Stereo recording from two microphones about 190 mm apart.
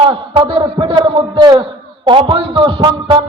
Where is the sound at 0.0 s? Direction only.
25° right (ahead or behind).